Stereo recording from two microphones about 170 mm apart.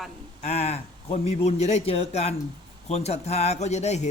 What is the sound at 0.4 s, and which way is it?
A man's voice, 40° left (ahead or behind).